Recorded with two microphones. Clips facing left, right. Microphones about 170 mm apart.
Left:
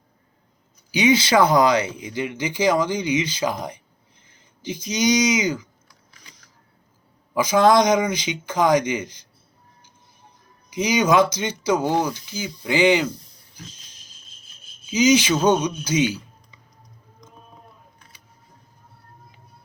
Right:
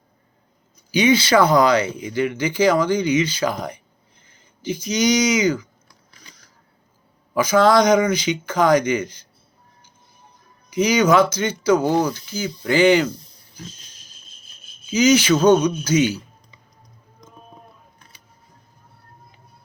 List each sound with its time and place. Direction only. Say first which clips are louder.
0.9 s speech: right 2 dB; 20° left (ahead or behind)
7.3 s speech: right 1 dB; 15° left (ahead or behind)
10.7 s speech: right 3 dB; 20° left (ahead or behind)
14.9 s speech: right 2 dB; 15° left (ahead or behind)